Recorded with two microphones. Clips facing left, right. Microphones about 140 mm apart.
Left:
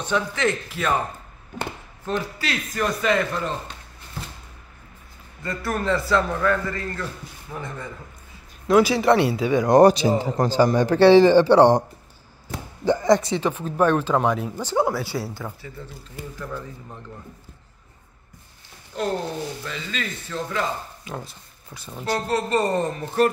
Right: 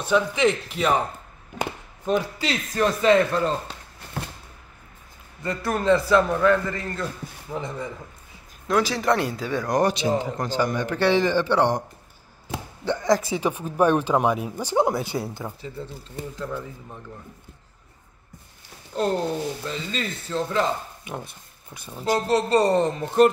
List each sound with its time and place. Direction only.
0.0 s speech: 10° right (ahead or behind); by 3.7 s 30° right (ahead or behind)
5.4 s speech: 20° right (ahead or behind)
8.6 s speech: 5° left (ahead or behind)
9.7 s a man's voice: 35° left (ahead or behind)
12.8 s speech: 5° left (ahead or behind); by 15.7 s 20° right (ahead or behind)
19.6 s speech: 30° right (ahead or behind)
22.0 s speech: 15° right (ahead or behind)
22.5 s speech: 30° right (ahead or behind)
22.8 s speech: 20° right (ahead or behind)